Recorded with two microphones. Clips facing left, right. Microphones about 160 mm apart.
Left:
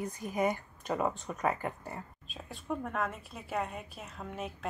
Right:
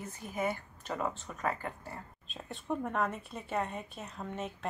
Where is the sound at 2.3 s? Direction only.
Centre (ahead or behind).